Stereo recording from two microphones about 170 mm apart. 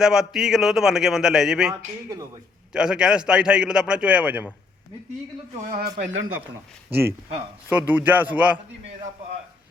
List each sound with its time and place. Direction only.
0.0 s a man's voice: 5° right (ahead or behind)
2.0 s speech: 20° right (ahead or behind)
2.7 s a man's voice: 5° right (ahead or behind)
5.5 s speech: 60° right (ahead or behind)
7.7 s a man's voice: 10° right (ahead or behind)